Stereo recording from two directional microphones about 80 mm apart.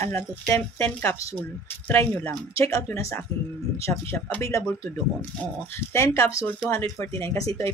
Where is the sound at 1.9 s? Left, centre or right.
Left.